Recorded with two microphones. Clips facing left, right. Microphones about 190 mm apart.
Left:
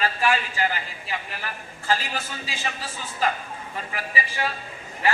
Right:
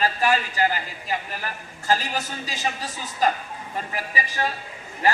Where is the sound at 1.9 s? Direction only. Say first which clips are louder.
Right 2 dB; 40° right (ahead or behind).